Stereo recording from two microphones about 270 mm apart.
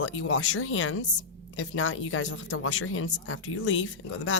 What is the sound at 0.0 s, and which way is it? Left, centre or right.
Speech, left.